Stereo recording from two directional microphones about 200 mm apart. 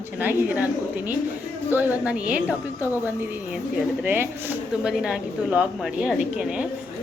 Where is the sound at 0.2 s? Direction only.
10° right (ahead or behind).